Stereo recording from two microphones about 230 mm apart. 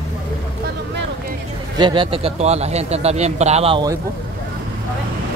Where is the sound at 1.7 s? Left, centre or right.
Centre.